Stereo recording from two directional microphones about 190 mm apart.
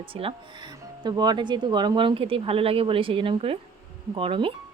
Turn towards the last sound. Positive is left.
turn(degrees=-30)  # may be behind; listen again after turning